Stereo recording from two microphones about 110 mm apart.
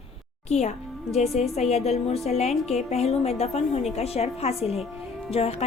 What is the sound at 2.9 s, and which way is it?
A woman's voice, 75° left (ahead or behind).